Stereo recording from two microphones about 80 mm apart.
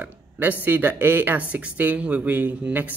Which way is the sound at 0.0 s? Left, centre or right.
Right.